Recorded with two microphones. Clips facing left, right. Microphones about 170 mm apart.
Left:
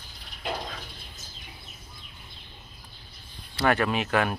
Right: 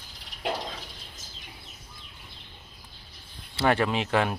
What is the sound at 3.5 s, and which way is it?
Speech, 25° right (ahead or behind).